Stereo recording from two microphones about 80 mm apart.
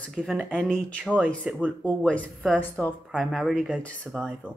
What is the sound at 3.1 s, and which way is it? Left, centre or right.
Speech, centre.